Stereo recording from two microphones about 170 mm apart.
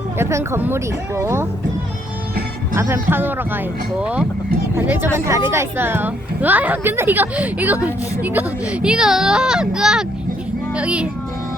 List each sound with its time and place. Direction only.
0.2 s a woman's voice: 15° right (ahead or behind)
2.7 s a woman's voice: 15° right (ahead or behind)